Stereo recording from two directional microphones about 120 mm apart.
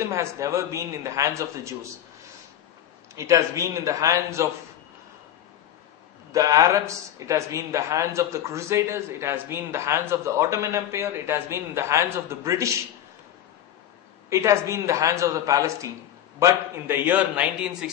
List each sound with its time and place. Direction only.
0.0 s a man's voice: 25° right (ahead or behind)
3.2 s a man's voice: 25° right (ahead or behind)
6.3 s a man's voice: 30° right (ahead or behind)
14.3 s a man's voice: 25° right (ahead or behind)